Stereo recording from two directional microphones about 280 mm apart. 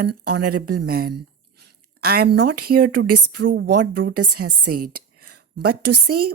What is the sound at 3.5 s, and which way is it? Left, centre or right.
Speech, right.